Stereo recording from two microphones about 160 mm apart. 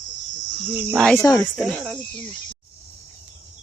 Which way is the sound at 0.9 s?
Centre (ahead or behind).